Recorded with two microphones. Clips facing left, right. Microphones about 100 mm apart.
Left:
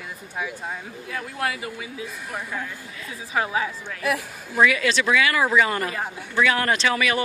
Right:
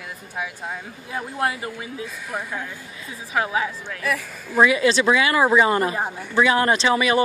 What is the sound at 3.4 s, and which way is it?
Speech, 20° right (ahead or behind).